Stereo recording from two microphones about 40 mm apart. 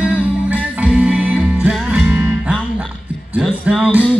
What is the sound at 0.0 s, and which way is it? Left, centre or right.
Music, right.